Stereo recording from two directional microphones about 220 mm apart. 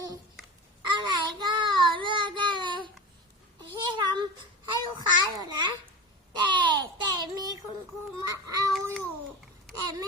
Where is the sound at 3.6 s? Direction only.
20° right (ahead or behind).